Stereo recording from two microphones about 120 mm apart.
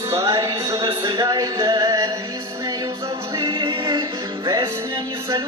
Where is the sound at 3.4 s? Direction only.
45° right (ahead or behind).